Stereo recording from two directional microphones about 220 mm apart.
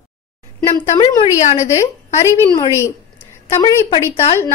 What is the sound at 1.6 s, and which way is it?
A woman's voice, 15° left (ahead or behind).